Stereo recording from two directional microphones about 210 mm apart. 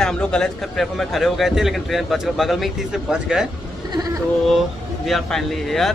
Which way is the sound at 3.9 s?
20° right (ahead or behind).